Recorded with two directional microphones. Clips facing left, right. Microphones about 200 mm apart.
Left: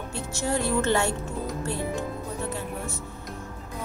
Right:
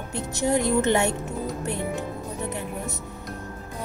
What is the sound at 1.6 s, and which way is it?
Music, 20° right (ahead or behind).